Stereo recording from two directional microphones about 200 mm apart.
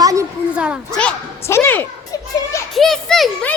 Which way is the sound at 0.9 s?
10° left (ahead or behind).